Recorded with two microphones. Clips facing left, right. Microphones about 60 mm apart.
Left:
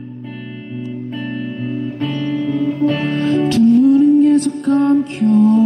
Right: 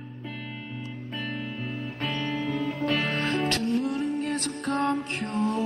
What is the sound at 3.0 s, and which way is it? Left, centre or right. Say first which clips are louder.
Music: left 11 dB; right.